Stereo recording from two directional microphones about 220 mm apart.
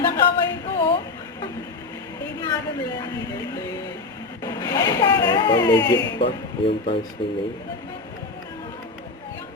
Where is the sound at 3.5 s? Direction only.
15° left (ahead or behind).